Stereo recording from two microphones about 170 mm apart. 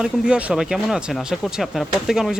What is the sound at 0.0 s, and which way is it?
Speech, 5° right (ahead or behind).